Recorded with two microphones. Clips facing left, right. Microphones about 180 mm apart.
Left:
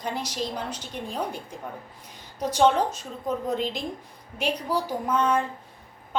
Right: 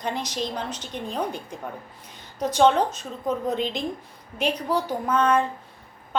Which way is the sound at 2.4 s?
10° left (ahead or behind).